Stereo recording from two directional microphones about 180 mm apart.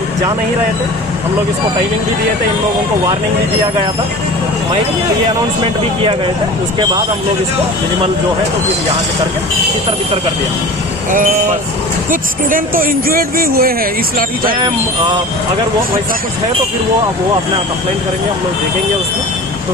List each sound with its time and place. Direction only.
11.1 s speech: 50° right (ahead or behind)